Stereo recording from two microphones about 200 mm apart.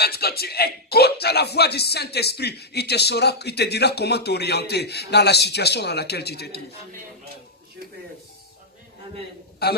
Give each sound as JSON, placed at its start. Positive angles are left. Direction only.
{"t": 0.0, "sound": "speech", "side_deg": 50}